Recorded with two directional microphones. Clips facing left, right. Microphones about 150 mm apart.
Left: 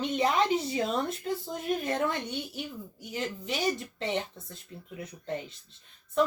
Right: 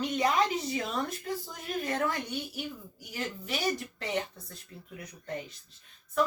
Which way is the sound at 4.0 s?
25° left (ahead or behind).